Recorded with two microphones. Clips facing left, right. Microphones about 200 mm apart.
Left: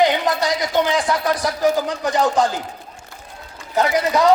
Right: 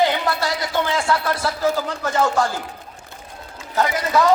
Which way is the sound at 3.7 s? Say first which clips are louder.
Left 2 dB; 20° left (ahead or behind).